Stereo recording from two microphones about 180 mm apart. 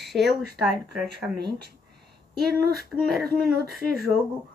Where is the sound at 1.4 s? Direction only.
65° right (ahead or behind).